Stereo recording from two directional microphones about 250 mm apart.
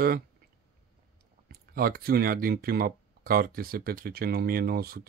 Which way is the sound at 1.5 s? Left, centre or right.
Right.